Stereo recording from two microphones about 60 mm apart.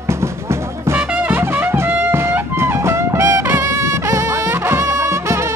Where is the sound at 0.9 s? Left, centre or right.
Right.